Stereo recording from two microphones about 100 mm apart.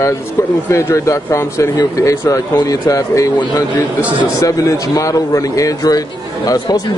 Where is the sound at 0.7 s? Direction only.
30° left (ahead or behind).